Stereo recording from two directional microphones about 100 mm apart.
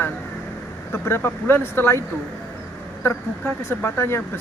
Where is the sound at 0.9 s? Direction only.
25° left (ahead or behind).